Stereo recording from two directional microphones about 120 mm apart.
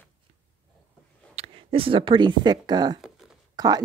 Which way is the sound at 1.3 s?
50° right (ahead or behind).